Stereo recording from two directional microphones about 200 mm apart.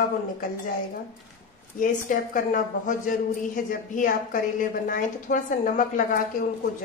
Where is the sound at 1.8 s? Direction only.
45° left (ahead or behind).